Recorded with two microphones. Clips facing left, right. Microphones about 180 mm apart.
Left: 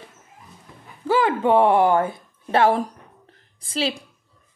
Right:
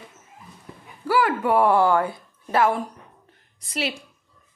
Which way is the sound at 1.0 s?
20° left (ahead or behind).